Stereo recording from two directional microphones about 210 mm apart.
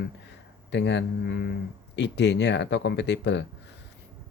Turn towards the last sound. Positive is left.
turn(degrees=55)  # may be behind; listen again after turning